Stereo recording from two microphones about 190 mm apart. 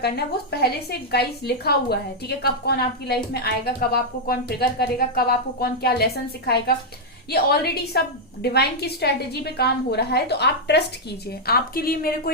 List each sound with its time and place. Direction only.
0.0 s a woman's voice: 55° left (ahead or behind)
7.3 s a woman's voice: 55° left (ahead or behind)